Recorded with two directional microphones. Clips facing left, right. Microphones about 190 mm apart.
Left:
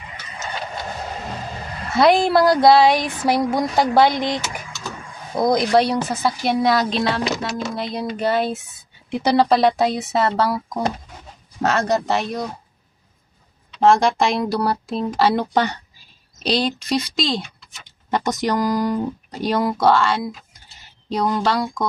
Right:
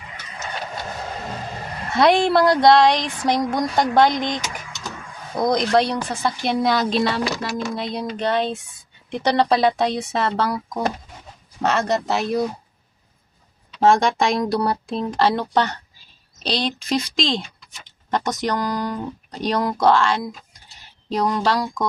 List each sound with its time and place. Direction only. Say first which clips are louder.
1.9 s speech: left 1 dB; centre (ahead or behind)
4.4 s a sound: left 2 dB; 20° right (ahead or behind)
5.4 s speech: left 2 dB; 5° left (ahead or behind)
11.6 s speech: left 1 dB; centre (ahead or behind)
13.8 s speech: left 1 dB; centre (ahead or behind)